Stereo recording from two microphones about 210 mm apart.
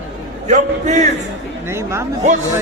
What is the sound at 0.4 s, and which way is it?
Speech, 35° right (ahead or behind).